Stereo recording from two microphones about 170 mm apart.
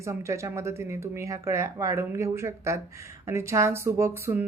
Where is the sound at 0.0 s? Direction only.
15° right (ahead or behind).